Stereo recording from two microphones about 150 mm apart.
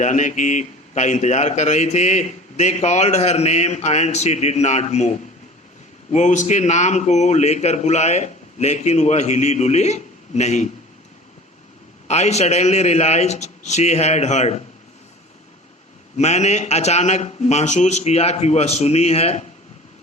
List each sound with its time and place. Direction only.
0.0 s a man's voice: 55° left (ahead or behind)
12.0 s a man's voice: 45° left (ahead or behind)
16.1 s a man's voice: 50° left (ahead or behind)